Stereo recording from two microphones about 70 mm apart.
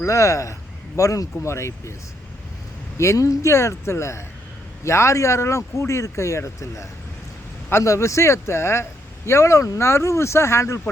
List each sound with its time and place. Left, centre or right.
0.0 s speech: left
3.0 s speech: left